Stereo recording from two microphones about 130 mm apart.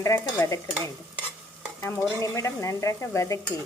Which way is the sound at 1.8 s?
20° left (ahead or behind).